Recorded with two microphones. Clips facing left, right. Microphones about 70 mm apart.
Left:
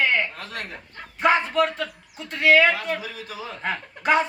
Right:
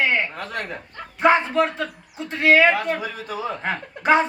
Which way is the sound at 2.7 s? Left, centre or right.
Right.